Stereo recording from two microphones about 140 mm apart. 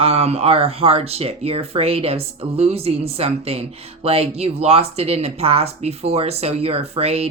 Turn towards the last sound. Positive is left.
turn(degrees=-45)  # may be behind; listen again after turning